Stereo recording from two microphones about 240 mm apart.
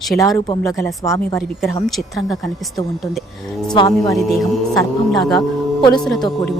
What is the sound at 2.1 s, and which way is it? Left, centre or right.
Speech, centre.